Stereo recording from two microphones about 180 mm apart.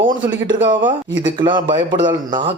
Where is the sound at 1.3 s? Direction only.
25° right (ahead or behind).